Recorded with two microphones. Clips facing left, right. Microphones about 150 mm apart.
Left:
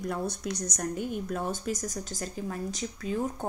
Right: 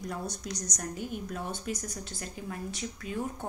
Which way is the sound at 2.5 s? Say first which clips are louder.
Left 1 dB; 40° left (ahead or behind).